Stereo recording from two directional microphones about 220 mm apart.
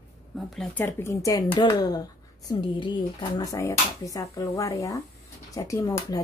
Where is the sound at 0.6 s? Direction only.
10° left (ahead or behind).